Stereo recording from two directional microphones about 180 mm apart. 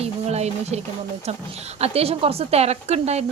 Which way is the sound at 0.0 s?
35° right (ahead or behind).